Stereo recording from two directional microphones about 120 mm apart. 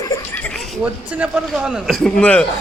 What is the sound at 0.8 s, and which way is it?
A man's voice, 10° right (ahead or behind).